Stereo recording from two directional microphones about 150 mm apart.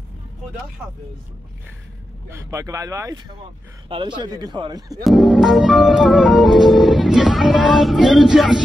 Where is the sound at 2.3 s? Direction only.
20° right (ahead or behind).